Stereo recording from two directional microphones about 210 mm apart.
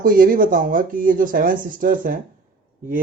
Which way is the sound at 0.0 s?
45° right (ahead or behind).